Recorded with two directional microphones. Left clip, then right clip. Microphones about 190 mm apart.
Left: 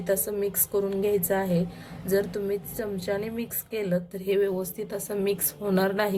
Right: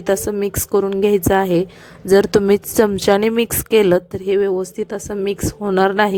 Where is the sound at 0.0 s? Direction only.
50° right (ahead or behind).